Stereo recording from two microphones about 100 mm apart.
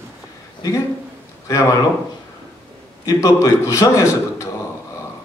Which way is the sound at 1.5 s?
35° left (ahead or behind).